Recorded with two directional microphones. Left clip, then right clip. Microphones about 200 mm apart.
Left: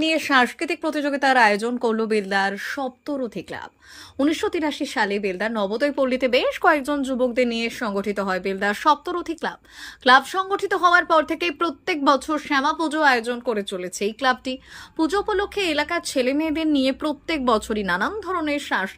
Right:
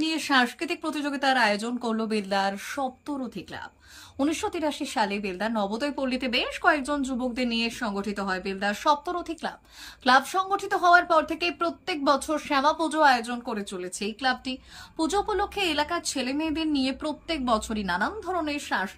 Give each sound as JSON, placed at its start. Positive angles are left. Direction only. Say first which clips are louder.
{"t": 0.0, "sound": "a woman's voice", "louder": "left 5 dB", "side_deg": 10}